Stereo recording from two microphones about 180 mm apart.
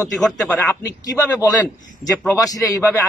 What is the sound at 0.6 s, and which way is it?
A man's voice, 15° left (ahead or behind).